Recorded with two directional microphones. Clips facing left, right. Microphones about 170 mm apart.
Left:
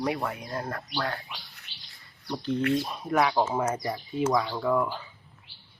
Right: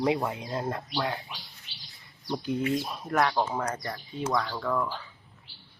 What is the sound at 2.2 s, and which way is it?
Speech, 15° right (ahead or behind).